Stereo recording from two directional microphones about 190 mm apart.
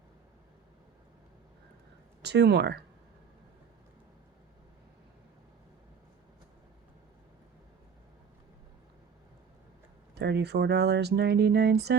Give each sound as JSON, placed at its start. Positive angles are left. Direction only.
{"t": 2.2, "sound": "speech", "side_deg": -60}
{"t": 10.2, "sound": "speech", "side_deg": -60}